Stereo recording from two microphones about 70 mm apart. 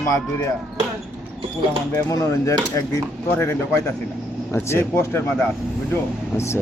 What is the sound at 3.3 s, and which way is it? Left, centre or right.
Speech, left.